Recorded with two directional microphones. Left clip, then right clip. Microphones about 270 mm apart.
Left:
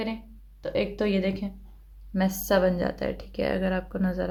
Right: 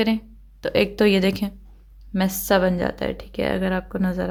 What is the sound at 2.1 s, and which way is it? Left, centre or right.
Speech, right.